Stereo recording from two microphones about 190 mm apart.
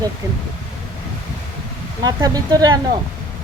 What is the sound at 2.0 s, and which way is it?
Speech, 20° right (ahead or behind).